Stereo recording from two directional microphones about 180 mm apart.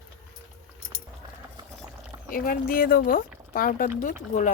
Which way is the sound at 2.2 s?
55° left (ahead or behind).